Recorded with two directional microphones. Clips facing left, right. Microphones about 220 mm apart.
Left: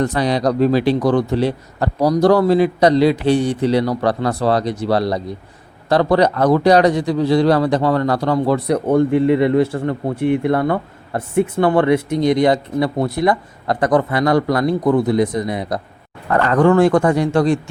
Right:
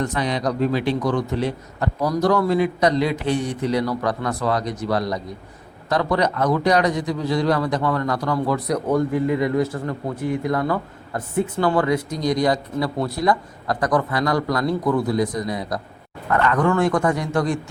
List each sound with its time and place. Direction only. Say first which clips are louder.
0.0 s a man's voice: left 6 dB; 35° left (ahead or behind)